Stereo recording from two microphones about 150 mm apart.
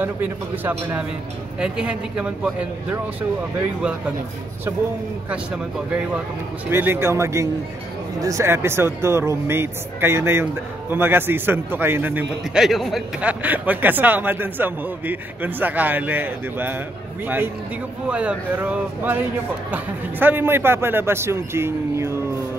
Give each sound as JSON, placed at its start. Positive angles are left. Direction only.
{"t": 0.0, "sound": "a man's voice", "side_deg": -10}
{"t": 6.7, "sound": "a man's voice", "side_deg": -15}
{"t": 18.0, "sound": "a man's voice", "side_deg": -5}